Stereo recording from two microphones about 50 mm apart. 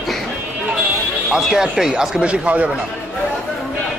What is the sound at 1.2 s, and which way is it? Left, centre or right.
Speech, centre.